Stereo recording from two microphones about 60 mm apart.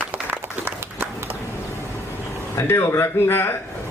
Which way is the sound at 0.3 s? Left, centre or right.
Right.